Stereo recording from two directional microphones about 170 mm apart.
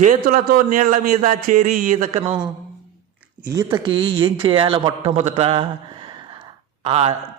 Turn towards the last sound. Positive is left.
turn(degrees=-35)  # may be behind; listen again after turning